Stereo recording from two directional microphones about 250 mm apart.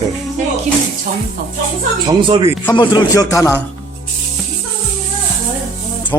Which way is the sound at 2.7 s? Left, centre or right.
Centre.